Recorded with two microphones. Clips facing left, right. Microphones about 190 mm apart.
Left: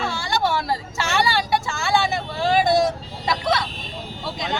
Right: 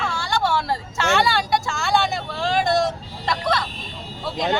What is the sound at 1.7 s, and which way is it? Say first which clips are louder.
Vehicle: even; centre (ahead or behind).